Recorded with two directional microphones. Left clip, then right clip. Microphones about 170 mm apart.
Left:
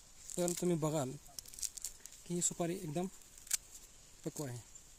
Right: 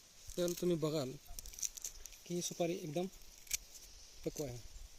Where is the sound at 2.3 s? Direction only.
85° left.